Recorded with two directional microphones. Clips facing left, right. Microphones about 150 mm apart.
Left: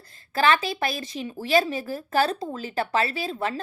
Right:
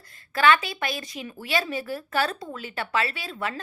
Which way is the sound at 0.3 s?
35° left (ahead or behind).